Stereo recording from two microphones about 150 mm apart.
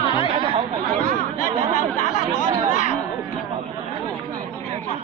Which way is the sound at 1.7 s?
60° left (ahead or behind).